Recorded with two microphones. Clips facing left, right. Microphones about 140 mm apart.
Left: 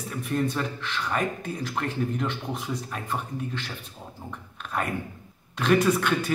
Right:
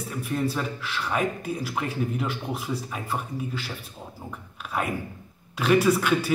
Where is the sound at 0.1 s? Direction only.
Centre (ahead or behind).